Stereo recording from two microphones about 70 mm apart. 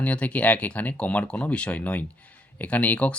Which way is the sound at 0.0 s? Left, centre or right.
Centre.